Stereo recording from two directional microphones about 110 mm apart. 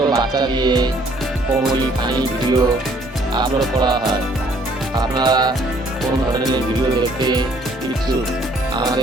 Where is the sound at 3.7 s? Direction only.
35° right (ahead or behind).